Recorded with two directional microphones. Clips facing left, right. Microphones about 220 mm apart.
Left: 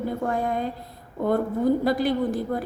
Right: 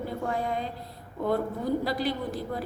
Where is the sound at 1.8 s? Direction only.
50° left (ahead or behind).